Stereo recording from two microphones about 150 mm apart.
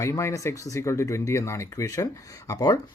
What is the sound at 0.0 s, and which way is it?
Speech, 20° left (ahead or behind).